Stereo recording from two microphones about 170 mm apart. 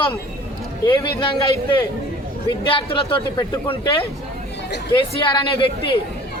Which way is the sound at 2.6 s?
30° left (ahead or behind).